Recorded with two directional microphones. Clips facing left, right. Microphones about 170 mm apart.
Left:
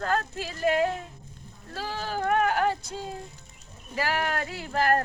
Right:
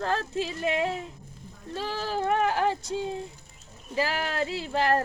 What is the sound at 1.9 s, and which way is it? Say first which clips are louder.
Speech: left 1 dB; 30° right (ahead or behind).